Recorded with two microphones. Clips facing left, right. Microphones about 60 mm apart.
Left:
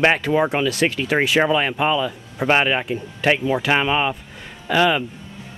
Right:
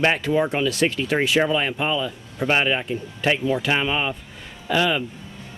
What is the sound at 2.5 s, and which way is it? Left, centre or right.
Speech, left.